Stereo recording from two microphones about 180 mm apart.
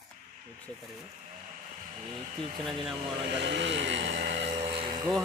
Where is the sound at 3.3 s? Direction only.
75° right (ahead or behind).